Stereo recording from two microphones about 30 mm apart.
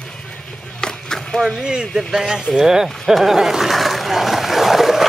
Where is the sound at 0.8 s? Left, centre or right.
Left.